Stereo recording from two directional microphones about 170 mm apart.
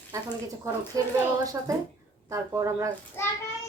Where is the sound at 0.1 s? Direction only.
20° right (ahead or behind).